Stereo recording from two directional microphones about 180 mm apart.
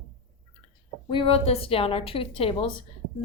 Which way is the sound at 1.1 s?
30° left (ahead or behind).